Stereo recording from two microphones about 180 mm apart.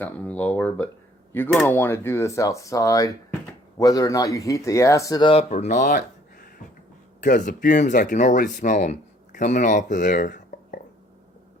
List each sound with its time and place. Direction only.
0.0 s speech: 10° left (ahead or behind)
5.3 s speech: 35° left (ahead or behind)
7.2 s speech: 45° left (ahead or behind)